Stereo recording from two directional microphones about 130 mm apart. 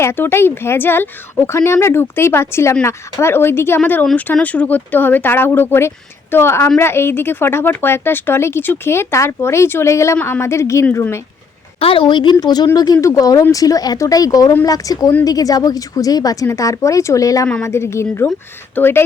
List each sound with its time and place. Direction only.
0.0 s speech: 20° left (ahead or behind)
11.8 s speech: 40° left (ahead or behind); by 19.0 s 15° left (ahead or behind)